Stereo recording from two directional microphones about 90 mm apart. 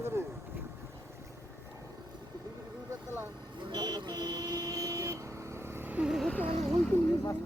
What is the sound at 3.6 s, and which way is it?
Vehicle, 55° right (ahead or behind).